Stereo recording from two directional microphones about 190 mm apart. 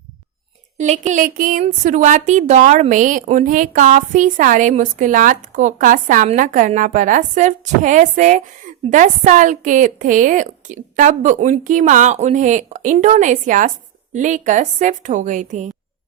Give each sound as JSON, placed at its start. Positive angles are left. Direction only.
{"t": 0.8, "sound": "a woman's voice", "side_deg": -40}